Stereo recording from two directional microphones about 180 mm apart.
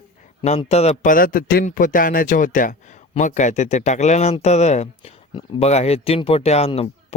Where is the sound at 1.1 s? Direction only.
50° left (ahead or behind).